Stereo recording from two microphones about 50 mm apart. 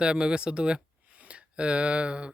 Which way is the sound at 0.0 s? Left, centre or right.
Centre.